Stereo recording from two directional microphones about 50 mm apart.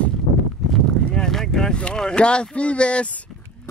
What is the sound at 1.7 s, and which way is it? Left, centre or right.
Speech, centre.